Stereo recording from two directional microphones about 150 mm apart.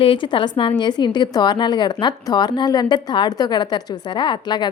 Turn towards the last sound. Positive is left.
turn(degrees=30)  # may be behind; listen again after turning